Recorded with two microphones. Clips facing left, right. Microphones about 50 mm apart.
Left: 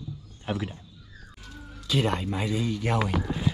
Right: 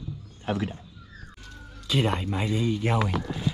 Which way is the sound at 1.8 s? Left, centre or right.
Centre.